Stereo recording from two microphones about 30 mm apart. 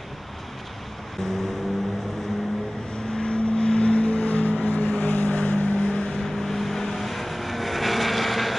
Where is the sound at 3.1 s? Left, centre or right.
Left.